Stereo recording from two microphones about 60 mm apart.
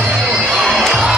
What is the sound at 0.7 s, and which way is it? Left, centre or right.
Music, centre.